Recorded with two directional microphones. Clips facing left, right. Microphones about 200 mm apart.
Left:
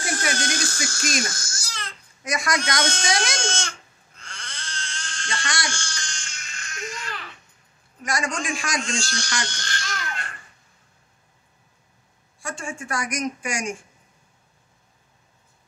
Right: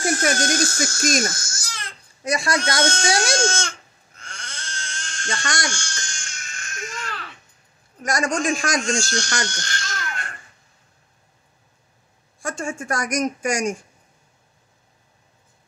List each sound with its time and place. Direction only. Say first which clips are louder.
0.0 s a child's voice: right 6 dB; 45° right (ahead or behind)
2.2 s speech: right 3 dB; 30° right (ahead or behind)
4.2 s crying: right 2 dB; 45° right (ahead or behind)
8.0 s speech: right 5 dB; 45° right (ahead or behind)
12.4 s speech: right 5 dB; 45° right (ahead or behind)